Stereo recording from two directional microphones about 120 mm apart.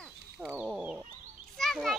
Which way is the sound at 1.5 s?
Centre (ahead or behind).